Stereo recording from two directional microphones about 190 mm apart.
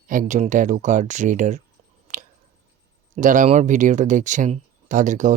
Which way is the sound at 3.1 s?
40° right (ahead or behind).